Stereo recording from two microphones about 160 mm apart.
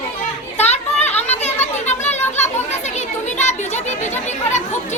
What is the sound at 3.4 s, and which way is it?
Chatter, 45° left (ahead or behind).